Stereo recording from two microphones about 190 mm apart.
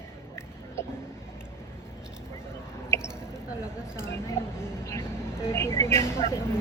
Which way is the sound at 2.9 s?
15° left (ahead or behind).